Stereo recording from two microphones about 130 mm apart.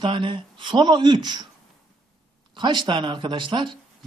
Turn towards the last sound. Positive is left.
turn(degrees=-40)  # may be behind; listen again after turning